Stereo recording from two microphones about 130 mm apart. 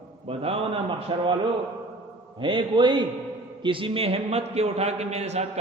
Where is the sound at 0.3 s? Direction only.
45° right (ahead or behind).